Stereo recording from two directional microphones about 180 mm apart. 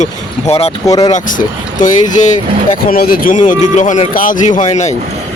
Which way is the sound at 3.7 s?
45° left (ahead or behind).